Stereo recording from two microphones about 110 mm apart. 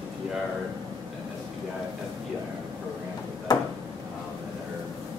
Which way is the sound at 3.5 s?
40° left (ahead or behind).